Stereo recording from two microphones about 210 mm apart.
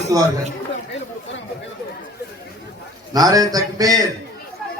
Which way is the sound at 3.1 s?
15° right (ahead or behind).